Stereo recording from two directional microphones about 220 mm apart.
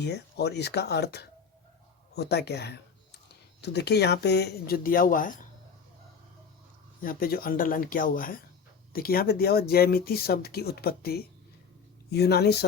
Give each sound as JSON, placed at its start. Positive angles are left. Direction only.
{"t": 0.0, "sound": "speech", "side_deg": 50}
{"t": 7.0, "sound": "speech", "side_deg": 40}